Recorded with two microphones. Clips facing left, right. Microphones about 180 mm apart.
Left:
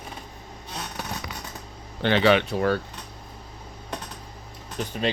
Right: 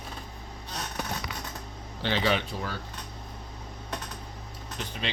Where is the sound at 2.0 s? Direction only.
65° left (ahead or behind).